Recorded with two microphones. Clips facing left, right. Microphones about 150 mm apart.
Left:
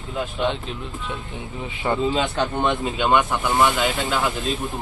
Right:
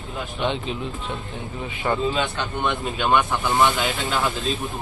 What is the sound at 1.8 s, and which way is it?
Speech, 25° left (ahead or behind).